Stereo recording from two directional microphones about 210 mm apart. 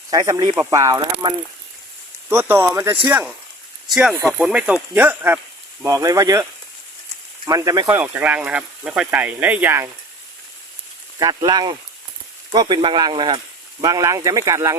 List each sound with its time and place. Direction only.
0.1 s speech: 20° right (ahead or behind)
7.4 s speech: 15° right (ahead or behind)
11.2 s speech: 20° right (ahead or behind)